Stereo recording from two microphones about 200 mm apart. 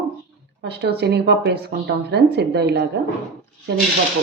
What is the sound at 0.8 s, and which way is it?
Speech, 55° right (ahead or behind).